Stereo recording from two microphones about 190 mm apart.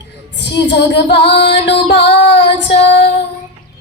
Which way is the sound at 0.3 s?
65° left (ahead or behind).